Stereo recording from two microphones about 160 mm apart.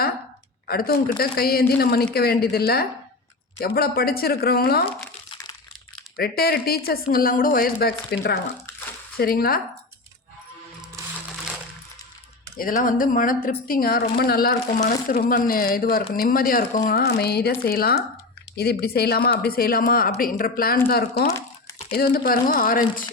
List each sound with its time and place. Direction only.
0.7 s speech: 70° left (ahead or behind)
5.3 s crumpling: 30° left (ahead or behind)
6.1 s speech: 70° left (ahead or behind); by 8.4 s 90° left
9.1 s speech: 65° left (ahead or behind)
12.5 s a woman's voice: 60° left (ahead or behind)